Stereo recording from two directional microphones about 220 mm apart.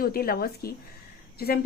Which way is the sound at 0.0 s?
45° left (ahead or behind).